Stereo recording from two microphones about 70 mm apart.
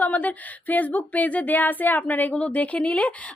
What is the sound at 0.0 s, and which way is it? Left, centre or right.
Speech, left.